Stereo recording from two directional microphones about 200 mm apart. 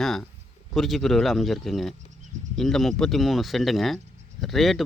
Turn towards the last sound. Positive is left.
turn(degrees=0)  # may be behind; listen again after turning